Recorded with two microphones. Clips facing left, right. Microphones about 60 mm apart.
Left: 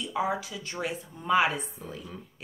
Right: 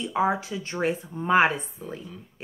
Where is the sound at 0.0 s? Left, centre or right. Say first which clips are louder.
Right 5 dB; right.